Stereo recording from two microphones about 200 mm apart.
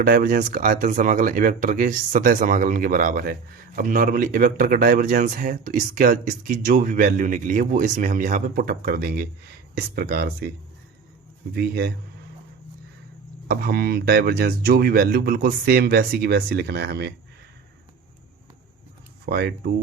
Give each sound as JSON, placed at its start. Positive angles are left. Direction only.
{"t": 0.0, "sound": "speech", "side_deg": -45}
{"t": 11.5, "sound": "speech", "side_deg": -50}
{"t": 13.5, "sound": "speech", "side_deg": -50}
{"t": 19.2, "sound": "speech", "side_deg": -50}